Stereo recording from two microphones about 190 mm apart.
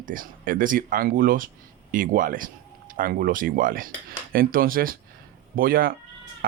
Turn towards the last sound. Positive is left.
turn(degrees=-50)  # may be behind; listen again after turning